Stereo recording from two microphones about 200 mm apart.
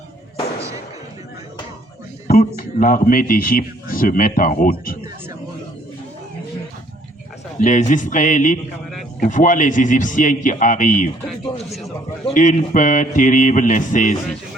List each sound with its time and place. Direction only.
2.2 s a sound: 45° left (ahead or behind)
2.6 s speech: 45° left (ahead or behind)
7.6 s a man's voice: 40° left (ahead or behind)
12.3 s a man's voice: 40° left (ahead or behind)